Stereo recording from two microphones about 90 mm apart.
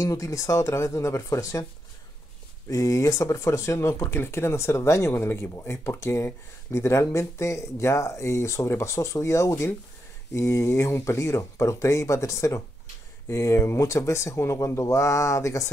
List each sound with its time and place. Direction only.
0.0 s speech: 35° left (ahead or behind)
2.7 s speech: 35° left (ahead or behind)